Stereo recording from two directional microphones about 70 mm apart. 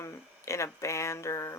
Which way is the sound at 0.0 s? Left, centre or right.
Left.